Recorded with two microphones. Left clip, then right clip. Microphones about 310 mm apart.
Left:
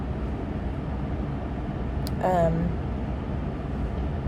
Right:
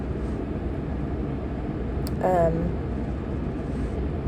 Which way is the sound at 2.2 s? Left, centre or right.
Left.